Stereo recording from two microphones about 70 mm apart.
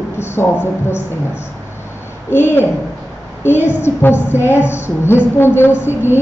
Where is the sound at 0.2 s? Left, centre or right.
Left.